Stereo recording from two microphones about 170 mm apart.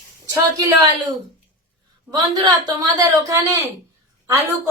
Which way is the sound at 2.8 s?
20° right (ahead or behind).